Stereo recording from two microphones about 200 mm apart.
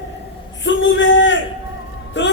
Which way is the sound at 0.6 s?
65° left (ahead or behind).